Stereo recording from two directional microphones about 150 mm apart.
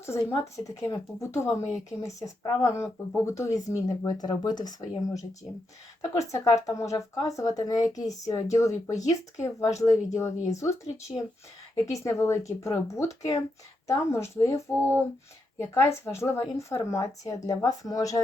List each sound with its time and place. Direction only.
0.0 s speech: 20° left (ahead or behind)